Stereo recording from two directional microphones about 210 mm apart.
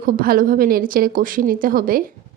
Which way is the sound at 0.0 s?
40° right (ahead or behind).